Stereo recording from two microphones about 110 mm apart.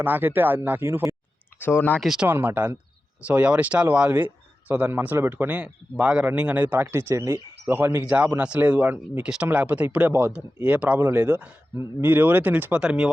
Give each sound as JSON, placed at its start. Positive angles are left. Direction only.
{"t": 0.0, "sound": "speech", "side_deg": -20}
{"t": 1.5, "sound": "speech", "side_deg": 15}
{"t": 2.0, "sound": "speech", "side_deg": -5}
{"t": 2.2, "sound": "speech", "side_deg": -20}